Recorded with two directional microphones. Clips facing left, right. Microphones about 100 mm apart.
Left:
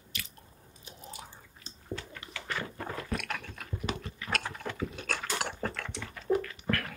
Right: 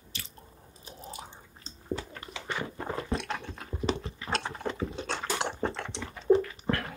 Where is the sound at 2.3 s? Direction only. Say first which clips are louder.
Right 1 dB; 20° right (ahead or behind).